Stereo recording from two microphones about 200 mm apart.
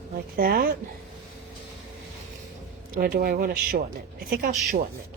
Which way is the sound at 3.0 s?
50° right (ahead or behind).